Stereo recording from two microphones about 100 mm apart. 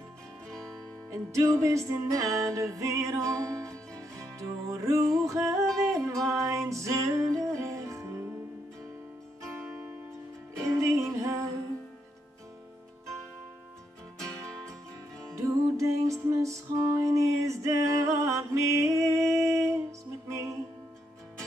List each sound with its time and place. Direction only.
1.1 s music: 30° right (ahead or behind)
10.8 s music: 30° right (ahead or behind)
14.1 s music: 5° left (ahead or behind)
15.3 s music: 30° right (ahead or behind)